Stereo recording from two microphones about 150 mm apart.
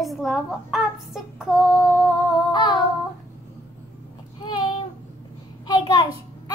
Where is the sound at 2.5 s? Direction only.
30° left (ahead or behind).